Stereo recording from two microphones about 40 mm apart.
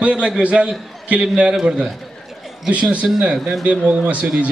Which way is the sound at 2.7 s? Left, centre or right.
Right.